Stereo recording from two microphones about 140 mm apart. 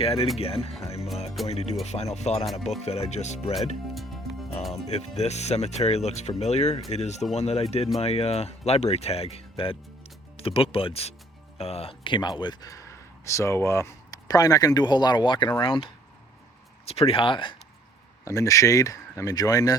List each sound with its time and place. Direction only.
0.0 s speech: 45° left (ahead or behind)
2.4 s speech: centre (ahead or behind)
2.8 s speech: 50° left (ahead or behind)
4.9 s speech: 50° left (ahead or behind)
18.3 s speech: 25° left (ahead or behind)